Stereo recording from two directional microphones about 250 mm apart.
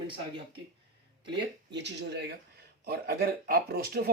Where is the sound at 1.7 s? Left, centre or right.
Right.